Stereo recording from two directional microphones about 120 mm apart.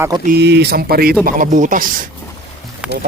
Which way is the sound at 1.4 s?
90° right.